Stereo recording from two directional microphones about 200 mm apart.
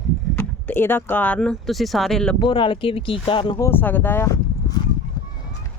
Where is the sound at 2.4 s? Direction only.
25° left (ahead or behind).